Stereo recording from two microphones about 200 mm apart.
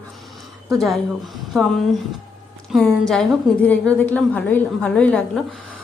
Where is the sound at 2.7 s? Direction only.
Centre (ahead or behind).